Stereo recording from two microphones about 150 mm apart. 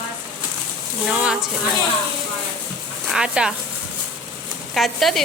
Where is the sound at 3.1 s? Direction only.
5° right (ahead or behind).